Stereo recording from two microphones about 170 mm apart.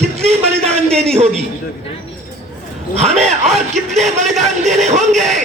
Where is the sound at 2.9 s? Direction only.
40° right (ahead or behind).